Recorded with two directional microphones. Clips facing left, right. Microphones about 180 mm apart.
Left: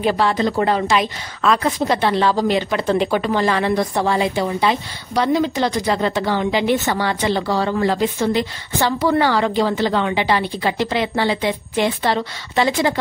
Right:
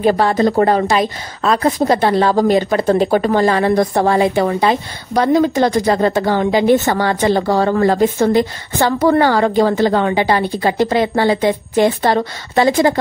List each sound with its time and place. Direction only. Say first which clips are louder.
0.0 s a woman's voice: right 5 dB; 45° right (ahead or behind)